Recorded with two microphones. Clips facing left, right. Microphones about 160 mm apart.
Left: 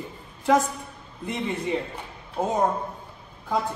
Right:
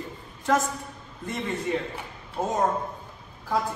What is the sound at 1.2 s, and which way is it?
A woman's voice, 10° left (ahead or behind).